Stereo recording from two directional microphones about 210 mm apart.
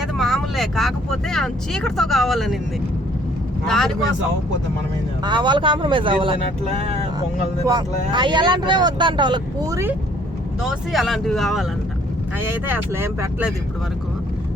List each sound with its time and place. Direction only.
0.2 s vehicle: centre (ahead or behind)
3.7 s speech: centre (ahead or behind)
5.2 s speech: 20° right (ahead or behind)
7.7 s speech: 20° right (ahead or behind)
10.6 s speech: centre (ahead or behind)
12.6 s speech: 10° right (ahead or behind)